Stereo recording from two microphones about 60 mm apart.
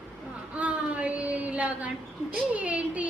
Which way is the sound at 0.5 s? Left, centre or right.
Right.